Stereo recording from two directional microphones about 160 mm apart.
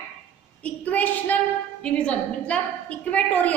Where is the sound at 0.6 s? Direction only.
10° left (ahead or behind).